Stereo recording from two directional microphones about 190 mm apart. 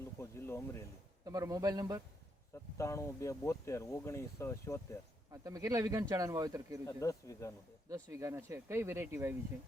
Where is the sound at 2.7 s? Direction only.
15° left (ahead or behind).